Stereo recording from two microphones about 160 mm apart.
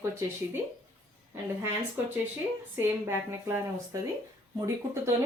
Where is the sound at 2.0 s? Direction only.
10° right (ahead or behind).